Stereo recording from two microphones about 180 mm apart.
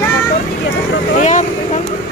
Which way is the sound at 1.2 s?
40° left (ahead or behind).